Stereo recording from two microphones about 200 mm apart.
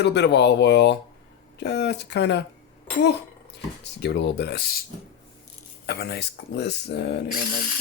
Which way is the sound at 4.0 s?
60° left (ahead or behind).